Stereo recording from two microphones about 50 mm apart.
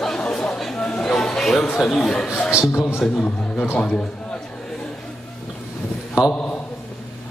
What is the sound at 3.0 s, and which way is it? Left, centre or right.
A man's voice, left.